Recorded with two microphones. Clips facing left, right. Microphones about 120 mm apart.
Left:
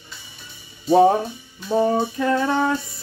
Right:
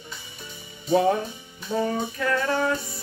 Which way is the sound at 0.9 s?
30° left (ahead or behind).